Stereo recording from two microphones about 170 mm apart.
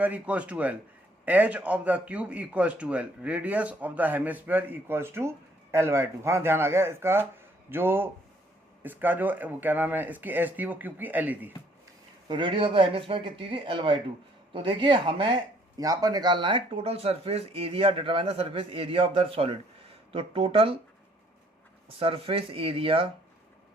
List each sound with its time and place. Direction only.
0.0 s a man's voice: 10° right (ahead or behind)
12.3 s speech: 30° right (ahead or behind)
21.8 s speech: 30° right (ahead or behind)